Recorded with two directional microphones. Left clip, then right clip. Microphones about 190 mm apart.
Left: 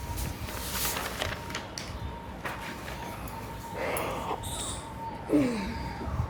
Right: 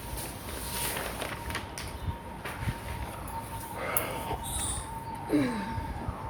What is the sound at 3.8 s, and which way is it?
Dog, 20° left (ahead or behind).